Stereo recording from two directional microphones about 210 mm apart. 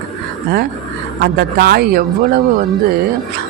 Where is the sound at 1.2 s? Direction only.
50° right (ahead or behind).